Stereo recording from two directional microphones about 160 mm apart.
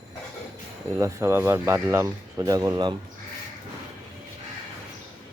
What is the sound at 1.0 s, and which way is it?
Speech, 20° right (ahead or behind).